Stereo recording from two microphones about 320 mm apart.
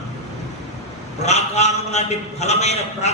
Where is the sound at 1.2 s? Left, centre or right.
Left.